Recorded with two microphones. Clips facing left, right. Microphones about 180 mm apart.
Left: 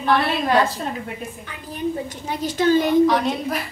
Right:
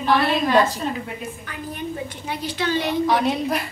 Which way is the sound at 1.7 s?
45° left (ahead or behind).